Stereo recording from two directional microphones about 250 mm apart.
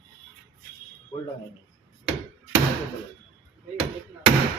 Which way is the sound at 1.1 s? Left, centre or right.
Centre.